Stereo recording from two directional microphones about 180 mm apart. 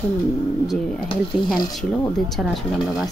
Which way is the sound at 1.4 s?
Centre (ahead or behind).